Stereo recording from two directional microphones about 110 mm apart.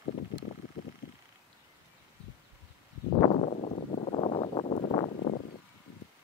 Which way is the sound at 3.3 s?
80° left.